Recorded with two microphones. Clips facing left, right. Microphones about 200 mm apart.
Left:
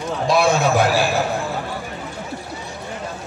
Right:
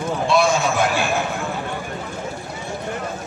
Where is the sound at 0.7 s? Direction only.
35° left (ahead or behind).